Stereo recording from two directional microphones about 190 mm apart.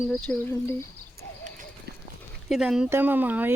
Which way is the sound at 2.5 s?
5° right (ahead or behind).